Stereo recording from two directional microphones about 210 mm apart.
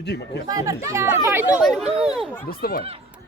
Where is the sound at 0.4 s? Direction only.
15° right (ahead or behind); by 2.4 s centre (ahead or behind).